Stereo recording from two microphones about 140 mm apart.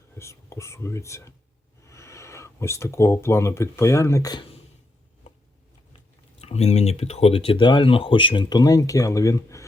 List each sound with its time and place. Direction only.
0.2 s speech: 20° left (ahead or behind)
6.4 s speech: 50° left (ahead or behind); by 9.6 s 20° left (ahead or behind)